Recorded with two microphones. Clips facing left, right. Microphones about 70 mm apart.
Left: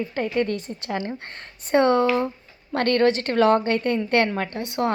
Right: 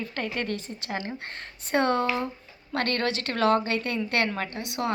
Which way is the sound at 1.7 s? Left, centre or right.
Left.